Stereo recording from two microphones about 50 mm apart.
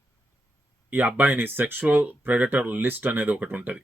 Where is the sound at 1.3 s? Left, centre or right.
Right.